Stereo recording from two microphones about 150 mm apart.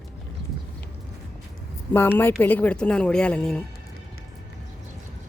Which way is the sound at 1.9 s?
15° left (ahead or behind).